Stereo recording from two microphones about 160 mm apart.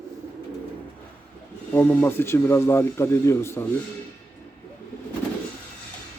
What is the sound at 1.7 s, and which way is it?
A man's voice, 10° left (ahead or behind).